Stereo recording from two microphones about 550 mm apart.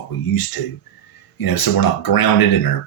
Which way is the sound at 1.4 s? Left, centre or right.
Left.